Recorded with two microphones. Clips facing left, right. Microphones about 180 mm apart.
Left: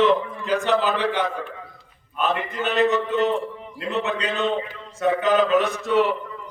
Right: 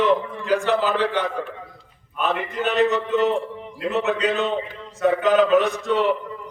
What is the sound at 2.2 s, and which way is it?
A man's voice, centre (ahead or behind).